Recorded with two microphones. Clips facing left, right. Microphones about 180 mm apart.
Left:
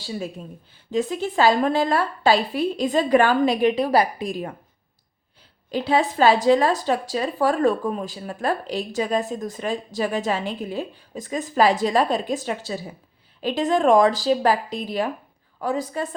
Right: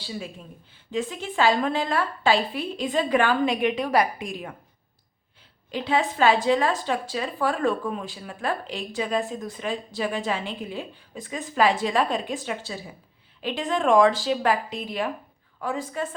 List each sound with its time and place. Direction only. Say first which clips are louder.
0.9 s speech: left 5 dB; 40° left (ahead or behind)
5.7 s speech: left 4 dB; 35° left (ahead or behind)